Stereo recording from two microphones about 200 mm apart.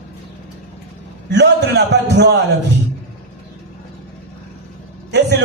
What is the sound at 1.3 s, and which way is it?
A man's voice, 60° right (ahead or behind).